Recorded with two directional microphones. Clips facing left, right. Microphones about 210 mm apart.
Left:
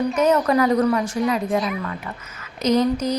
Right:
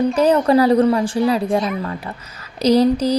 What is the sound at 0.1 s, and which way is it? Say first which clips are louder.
A woman's voice: right 4 dB; 30° right (ahead or behind).